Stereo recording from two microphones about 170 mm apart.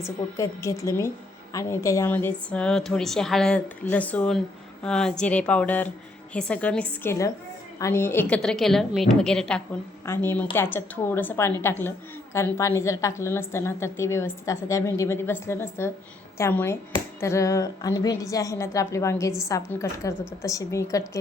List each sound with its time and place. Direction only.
0.0 s a woman's voice: 20° left (ahead or behind)